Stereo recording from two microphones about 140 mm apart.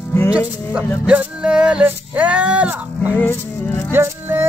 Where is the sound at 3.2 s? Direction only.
15° left (ahead or behind).